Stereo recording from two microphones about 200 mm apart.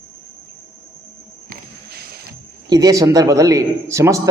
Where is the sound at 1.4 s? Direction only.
50° right (ahead or behind).